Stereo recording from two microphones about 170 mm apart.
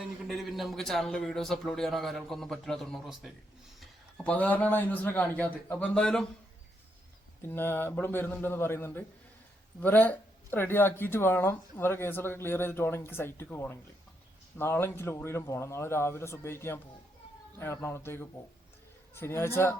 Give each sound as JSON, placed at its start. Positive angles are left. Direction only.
{"t": 0.3, "sound": "a man's voice", "side_deg": 0}
{"t": 7.4, "sound": "speech", "side_deg": 15}